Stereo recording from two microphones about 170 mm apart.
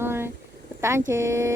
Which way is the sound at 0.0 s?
15° right (ahead or behind).